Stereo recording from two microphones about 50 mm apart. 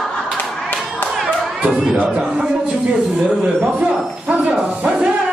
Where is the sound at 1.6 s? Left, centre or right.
Right.